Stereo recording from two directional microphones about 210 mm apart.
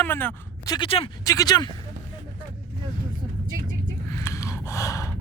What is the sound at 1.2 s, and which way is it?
Speech, 15° left (ahead or behind).